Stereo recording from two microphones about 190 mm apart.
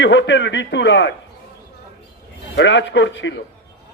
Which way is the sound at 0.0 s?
75° left (ahead or behind).